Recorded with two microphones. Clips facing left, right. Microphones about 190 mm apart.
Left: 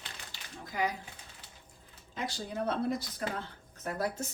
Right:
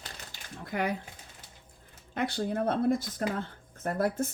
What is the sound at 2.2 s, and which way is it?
Speech, 60° right (ahead or behind).